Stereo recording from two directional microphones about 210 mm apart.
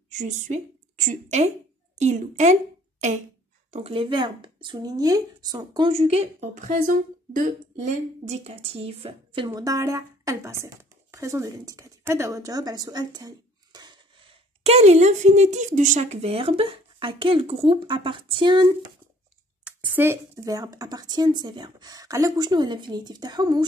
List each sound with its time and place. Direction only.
0.1 s a woman's voice: 35° right (ahead or behind)
3.7 s speech: 25° right (ahead or behind)
19.6 s speech: 5° right (ahead or behind)